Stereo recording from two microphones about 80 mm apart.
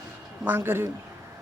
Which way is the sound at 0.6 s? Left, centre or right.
Right.